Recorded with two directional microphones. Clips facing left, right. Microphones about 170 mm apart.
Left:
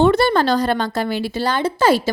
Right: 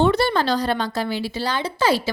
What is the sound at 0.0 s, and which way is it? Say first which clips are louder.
A woman's voice: left 4 dB; 50° left (ahead or behind).